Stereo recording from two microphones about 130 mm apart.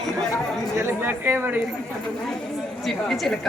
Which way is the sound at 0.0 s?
Centre (ahead or behind).